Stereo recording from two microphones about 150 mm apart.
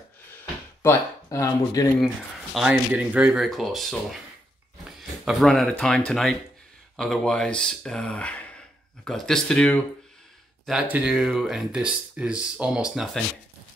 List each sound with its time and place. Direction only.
0.8 s speech: 20° left (ahead or behind)
2.0 s speech: centre (ahead or behind)
5.2 s speech: centre (ahead or behind)
10.6 s speech: 5° right (ahead or behind)